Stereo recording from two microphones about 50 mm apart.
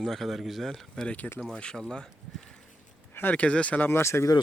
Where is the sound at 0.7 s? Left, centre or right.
Centre.